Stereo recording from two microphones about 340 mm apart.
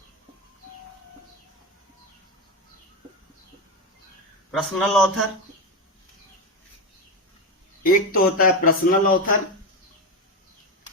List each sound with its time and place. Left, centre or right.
4.5 s a man's voice: centre
7.9 s speech: left